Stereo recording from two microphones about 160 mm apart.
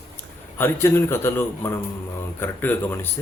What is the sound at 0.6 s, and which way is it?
Speech, 15° left (ahead or behind).